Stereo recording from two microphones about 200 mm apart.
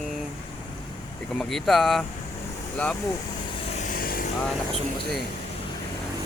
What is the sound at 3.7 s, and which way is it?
Vehicle, 40° left (ahead or behind).